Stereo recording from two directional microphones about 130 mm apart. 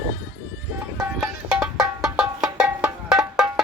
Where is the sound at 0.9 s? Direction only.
20° right (ahead or behind).